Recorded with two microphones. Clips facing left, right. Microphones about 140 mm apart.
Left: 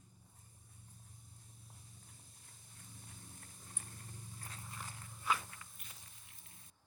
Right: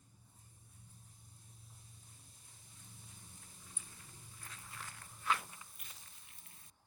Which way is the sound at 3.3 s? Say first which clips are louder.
Left 3 dB; 55° left (ahead or behind).